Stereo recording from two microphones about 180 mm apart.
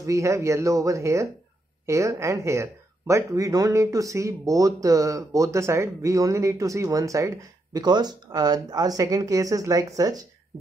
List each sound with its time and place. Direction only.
0.0 s speech: 15° right (ahead or behind)